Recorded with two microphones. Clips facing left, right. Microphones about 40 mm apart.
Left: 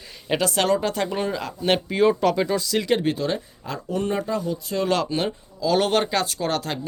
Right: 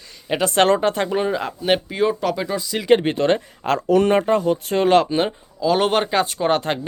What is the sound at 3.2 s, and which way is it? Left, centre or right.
Speech, right.